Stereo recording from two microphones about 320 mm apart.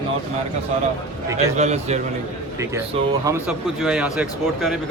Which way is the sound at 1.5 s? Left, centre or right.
Right.